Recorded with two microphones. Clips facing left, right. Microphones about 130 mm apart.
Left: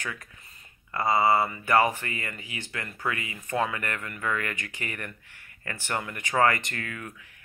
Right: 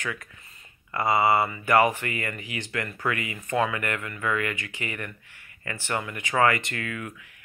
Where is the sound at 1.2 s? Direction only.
20° right (ahead or behind).